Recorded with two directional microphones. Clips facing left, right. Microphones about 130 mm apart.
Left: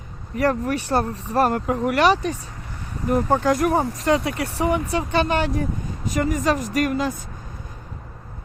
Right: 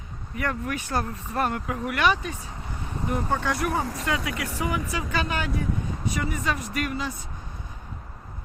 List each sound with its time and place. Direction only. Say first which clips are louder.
0.3 s speech: left 8 dB; 35° left (ahead or behind)
6.1 s speech: left 10 dB; 40° left (ahead or behind)